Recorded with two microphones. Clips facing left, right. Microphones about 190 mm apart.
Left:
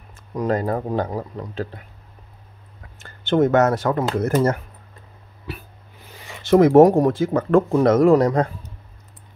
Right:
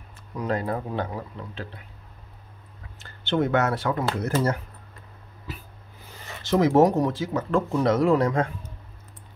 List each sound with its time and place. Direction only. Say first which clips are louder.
0.4 s speech: left 5 dB; 45° left (ahead or behind)
3.0 s speech: left 6 dB; 45° left (ahead or behind)
6.4 s speech: left 7 dB; 60° left (ahead or behind); by 8.5 s 40° left (ahead or behind)